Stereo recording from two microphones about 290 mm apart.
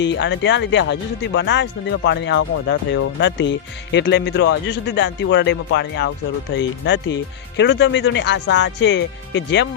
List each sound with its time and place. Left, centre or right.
0.0 s speech: left